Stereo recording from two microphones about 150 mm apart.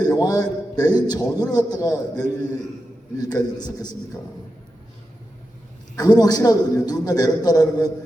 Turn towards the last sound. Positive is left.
turn(degrees=25)  # may be behind; listen again after turning